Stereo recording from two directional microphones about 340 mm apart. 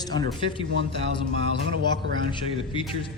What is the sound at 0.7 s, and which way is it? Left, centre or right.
Speech, right.